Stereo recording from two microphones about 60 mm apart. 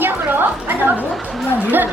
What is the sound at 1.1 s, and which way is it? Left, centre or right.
Speech, centre.